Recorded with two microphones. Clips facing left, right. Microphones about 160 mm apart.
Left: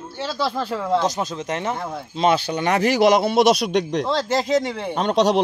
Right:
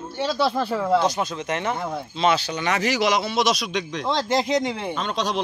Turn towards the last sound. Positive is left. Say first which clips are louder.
# left 8 dB
turn(degrees=65)  # may be behind; listen again after turning